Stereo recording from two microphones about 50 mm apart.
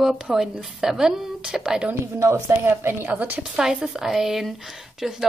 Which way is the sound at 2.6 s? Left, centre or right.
Right.